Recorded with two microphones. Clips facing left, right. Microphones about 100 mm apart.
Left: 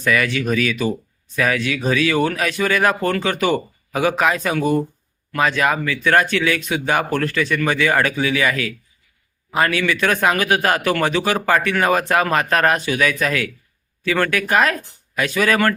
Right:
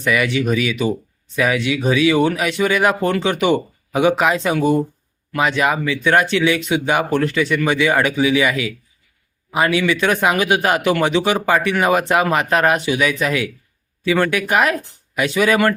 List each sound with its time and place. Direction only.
0.0 s a man's voice: 15° right (ahead or behind)